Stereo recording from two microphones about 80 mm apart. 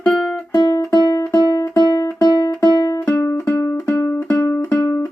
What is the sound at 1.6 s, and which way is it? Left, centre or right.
Music, left.